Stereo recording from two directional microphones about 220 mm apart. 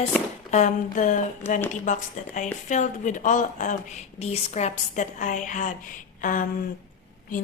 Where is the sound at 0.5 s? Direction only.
35° left (ahead or behind).